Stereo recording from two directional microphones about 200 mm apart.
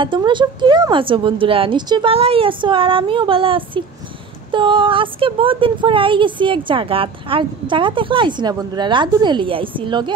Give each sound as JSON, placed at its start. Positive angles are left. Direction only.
{"t": 0.0, "sound": "speech", "side_deg": -25}